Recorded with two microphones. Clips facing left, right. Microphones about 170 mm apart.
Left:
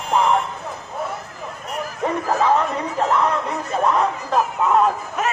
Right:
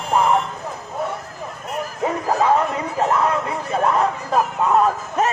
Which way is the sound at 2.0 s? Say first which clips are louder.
Even; 10° right (ahead or behind).